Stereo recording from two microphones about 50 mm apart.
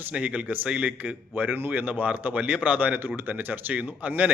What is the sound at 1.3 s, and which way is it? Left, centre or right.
A man's voice, right.